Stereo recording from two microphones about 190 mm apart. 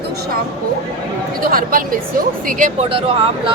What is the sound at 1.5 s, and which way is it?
Speech, 45° right (ahead or behind).